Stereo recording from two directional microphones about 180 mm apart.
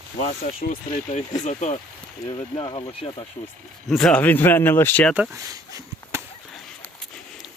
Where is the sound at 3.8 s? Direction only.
Centre (ahead or behind).